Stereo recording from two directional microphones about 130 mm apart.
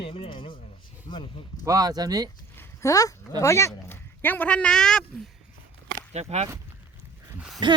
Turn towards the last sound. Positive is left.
turn(degrees=-35)  # may be behind; listen again after turning